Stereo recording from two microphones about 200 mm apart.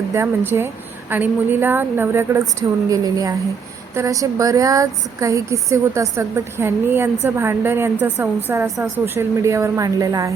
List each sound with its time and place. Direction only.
0.1 s speech: 10° right (ahead or behind)
9.1 s speech: 15° right (ahead or behind)